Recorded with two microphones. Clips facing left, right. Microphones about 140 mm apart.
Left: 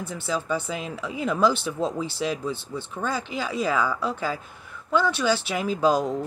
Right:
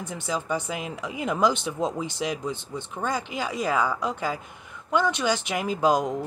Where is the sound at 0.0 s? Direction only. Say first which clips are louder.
Left 1 dB; 15° right (ahead or behind).